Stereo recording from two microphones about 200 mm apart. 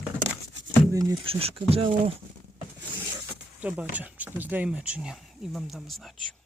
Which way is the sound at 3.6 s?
5° right (ahead or behind).